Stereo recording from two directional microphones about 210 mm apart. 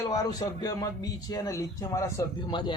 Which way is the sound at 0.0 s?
15° left (ahead or behind).